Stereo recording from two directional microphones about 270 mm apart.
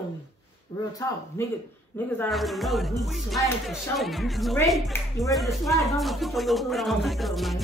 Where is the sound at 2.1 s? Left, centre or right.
Centre.